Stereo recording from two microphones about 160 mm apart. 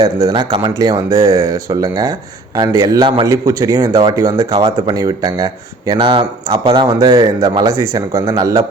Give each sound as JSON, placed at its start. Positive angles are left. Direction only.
{"t": 0.0, "sound": "speech", "side_deg": -20}